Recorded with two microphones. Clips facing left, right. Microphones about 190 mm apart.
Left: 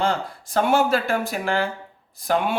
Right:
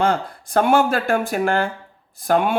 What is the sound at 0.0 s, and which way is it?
Speech, 55° right (ahead or behind).